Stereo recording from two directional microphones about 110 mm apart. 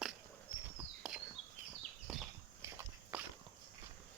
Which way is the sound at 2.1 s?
5° right (ahead or behind).